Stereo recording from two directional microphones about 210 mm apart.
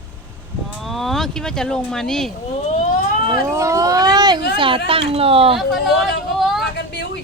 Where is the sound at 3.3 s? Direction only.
15° right (ahead or behind).